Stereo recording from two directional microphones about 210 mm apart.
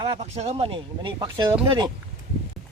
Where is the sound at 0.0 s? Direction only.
30° right (ahead or behind).